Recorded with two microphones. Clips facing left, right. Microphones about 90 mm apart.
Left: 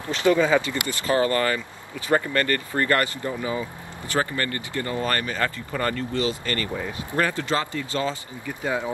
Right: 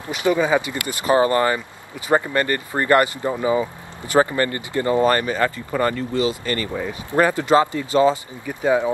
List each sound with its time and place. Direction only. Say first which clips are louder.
0.0 s speech: even; 15° right (ahead or behind)